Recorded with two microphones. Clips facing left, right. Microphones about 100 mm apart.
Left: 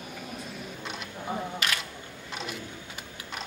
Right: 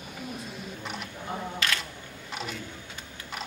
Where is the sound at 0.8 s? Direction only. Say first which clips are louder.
Right 2 dB; centre (ahead or behind).